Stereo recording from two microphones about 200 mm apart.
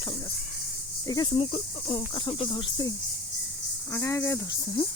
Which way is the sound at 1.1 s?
20° left (ahead or behind).